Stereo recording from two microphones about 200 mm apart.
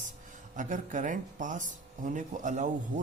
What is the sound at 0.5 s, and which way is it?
Speech, 40° right (ahead or behind).